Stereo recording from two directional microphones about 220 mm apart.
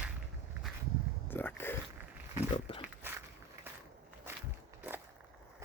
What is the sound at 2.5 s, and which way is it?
Pig, 25° left (ahead or behind).